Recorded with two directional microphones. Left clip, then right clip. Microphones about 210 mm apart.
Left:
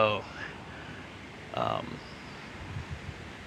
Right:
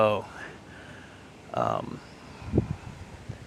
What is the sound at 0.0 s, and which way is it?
Speech, 40° right (ahead or behind).